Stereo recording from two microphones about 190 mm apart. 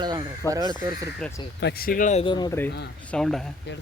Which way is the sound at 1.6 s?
50° left (ahead or behind).